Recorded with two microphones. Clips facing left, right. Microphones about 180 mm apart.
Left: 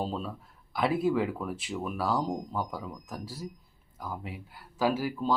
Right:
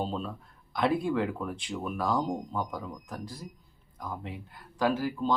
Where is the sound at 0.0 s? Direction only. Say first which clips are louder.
Even; 5° left (ahead or behind).